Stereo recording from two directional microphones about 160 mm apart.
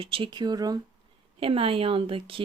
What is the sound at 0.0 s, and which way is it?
Speech, 35° right (ahead or behind).